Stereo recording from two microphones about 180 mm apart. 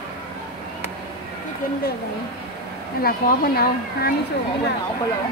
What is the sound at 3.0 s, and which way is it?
Speech, 55° left (ahead or behind).